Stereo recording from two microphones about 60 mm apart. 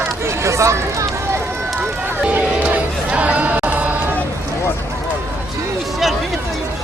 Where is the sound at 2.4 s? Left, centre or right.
Right.